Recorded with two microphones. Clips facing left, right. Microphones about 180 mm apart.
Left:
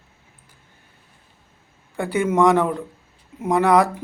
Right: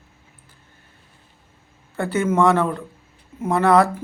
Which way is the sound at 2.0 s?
15° left (ahead or behind).